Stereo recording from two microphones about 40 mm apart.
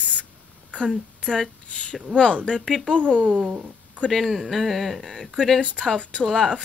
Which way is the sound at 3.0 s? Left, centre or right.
Right.